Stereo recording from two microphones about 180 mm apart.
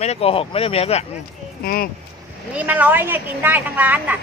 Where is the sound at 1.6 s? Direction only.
55° left (ahead or behind).